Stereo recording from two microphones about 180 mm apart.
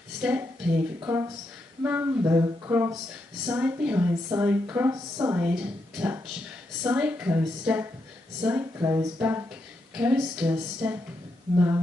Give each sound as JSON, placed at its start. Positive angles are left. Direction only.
{"t": 0.2, "sound": "a woman's voice", "side_deg": -10}
{"t": 5.6, "sound": "a woman's voice", "side_deg": -5}